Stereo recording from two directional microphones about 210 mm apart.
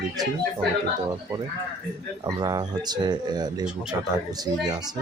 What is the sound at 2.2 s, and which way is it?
Speech, 20° right (ahead or behind).